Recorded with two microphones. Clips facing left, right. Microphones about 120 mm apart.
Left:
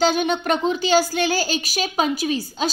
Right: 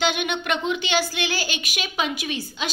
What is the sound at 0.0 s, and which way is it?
A woman's voice, 35° left (ahead or behind).